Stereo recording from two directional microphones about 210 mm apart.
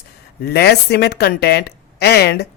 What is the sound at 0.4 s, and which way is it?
A woman's voice, 50° left (ahead or behind).